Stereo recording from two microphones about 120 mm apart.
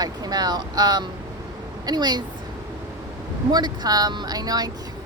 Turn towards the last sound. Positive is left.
turn(degrees=-35)  # may be behind; listen again after turning